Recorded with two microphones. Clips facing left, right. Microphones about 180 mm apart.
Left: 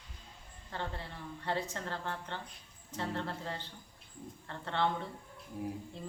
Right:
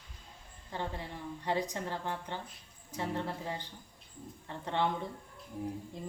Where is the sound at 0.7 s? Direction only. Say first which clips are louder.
Right 2 dB; 15° right (ahead or behind).